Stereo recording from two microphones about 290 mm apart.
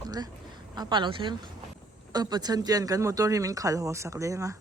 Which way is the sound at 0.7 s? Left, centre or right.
Centre.